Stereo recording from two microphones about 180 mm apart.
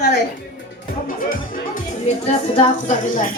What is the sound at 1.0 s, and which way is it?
Speech, 50° left (ahead or behind).